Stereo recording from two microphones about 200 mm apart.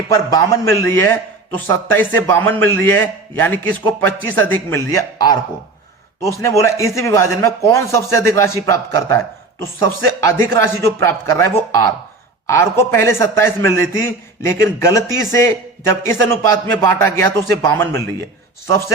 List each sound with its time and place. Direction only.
0.1 s a man's voice: 15° left (ahead or behind)